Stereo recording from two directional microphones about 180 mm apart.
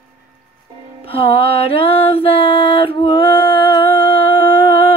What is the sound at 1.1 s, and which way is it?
Music, 30° left (ahead or behind).